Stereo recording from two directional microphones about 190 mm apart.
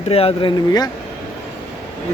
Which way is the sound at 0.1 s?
30° left (ahead or behind).